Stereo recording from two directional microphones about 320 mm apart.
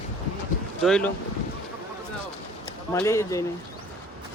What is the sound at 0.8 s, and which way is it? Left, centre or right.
Speech, centre.